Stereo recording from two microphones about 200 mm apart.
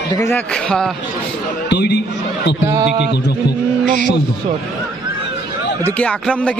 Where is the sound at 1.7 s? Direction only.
55° left (ahead or behind).